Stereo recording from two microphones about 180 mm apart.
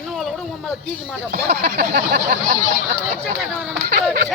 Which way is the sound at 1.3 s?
65° right (ahead or behind).